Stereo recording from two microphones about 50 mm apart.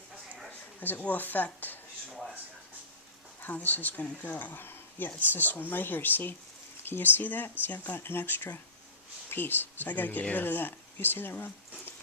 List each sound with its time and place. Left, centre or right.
0.8 s speech: left
3.4 s speech: left